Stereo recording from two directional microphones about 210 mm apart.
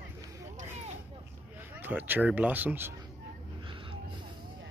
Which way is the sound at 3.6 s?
25° right (ahead or behind).